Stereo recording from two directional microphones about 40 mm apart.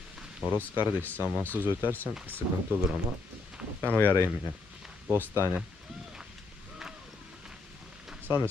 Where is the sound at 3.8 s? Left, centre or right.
Left.